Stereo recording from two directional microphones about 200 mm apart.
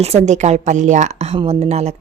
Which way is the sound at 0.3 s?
35° right (ahead or behind).